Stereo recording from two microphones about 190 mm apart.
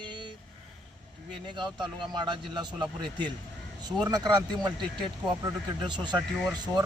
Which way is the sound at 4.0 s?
20° right (ahead or behind).